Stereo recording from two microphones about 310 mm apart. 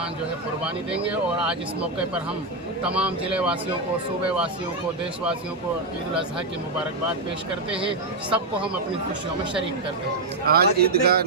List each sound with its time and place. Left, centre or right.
0.6 s speech: centre
2.9 s speech: centre
7.8 s speech: centre
10.4 s speech: right